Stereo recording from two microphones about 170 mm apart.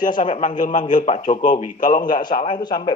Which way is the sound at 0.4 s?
50° left (ahead or behind).